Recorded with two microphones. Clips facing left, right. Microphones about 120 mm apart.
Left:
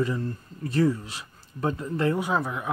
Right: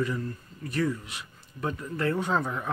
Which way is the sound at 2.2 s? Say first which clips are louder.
Left 1 dB; 10° left (ahead or behind).